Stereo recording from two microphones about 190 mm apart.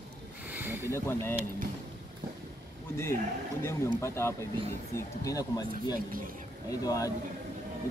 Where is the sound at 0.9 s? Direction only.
15° left (ahead or behind).